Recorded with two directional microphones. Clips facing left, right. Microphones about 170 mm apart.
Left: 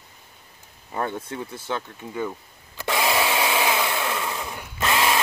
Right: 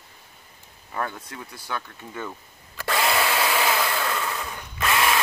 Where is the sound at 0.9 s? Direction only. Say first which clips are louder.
Left 3 dB; 25° left (ahead or behind).